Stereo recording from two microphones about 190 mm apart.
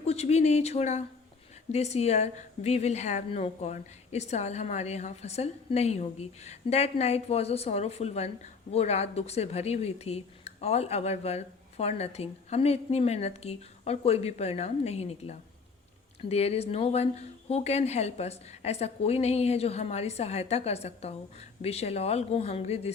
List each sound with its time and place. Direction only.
0.0 s speech: 35° left (ahead or behind)